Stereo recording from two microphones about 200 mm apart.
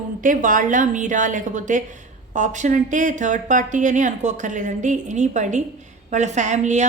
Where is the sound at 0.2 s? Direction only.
40° right (ahead or behind).